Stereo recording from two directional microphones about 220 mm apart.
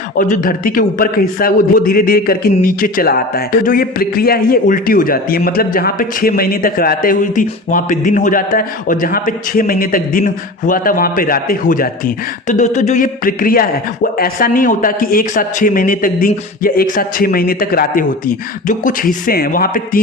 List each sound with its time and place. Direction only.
0.2 s speech: 40° left (ahead or behind)